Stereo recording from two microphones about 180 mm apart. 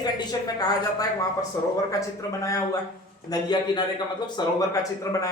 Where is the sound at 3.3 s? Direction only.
25° left (ahead or behind).